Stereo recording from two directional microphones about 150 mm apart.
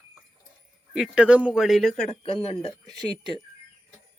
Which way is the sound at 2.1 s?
40° left (ahead or behind).